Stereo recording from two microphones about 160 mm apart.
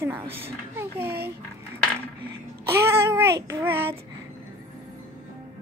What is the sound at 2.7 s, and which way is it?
A child's voice, 15° right (ahead or behind).